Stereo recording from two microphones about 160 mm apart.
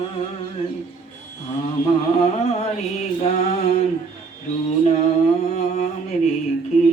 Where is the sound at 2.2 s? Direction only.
45° left (ahead or behind).